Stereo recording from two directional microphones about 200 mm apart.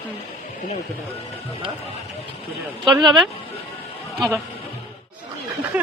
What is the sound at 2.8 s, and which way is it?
Speech, 20° right (ahead or behind).